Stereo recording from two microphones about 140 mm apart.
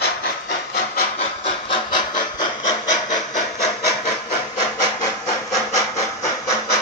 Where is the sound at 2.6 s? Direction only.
60° left (ahead or behind).